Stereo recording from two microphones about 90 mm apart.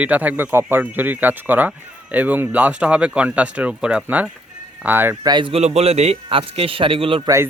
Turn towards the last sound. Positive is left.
turn(degrees=-85)